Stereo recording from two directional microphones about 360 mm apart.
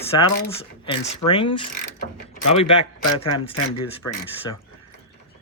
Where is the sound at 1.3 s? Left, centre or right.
Centre.